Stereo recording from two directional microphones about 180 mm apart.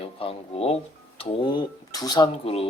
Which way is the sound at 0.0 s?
30° left (ahead or behind).